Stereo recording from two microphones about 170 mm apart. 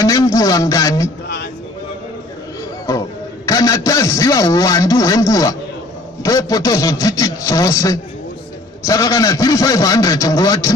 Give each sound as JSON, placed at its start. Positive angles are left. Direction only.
{"t": 0.0, "sound": "a man's voice", "side_deg": 20}
{"t": 2.9, "sound": "a man's voice", "side_deg": 20}